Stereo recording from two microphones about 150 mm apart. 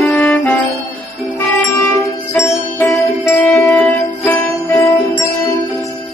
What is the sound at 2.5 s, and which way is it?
Music, 20° left (ahead or behind).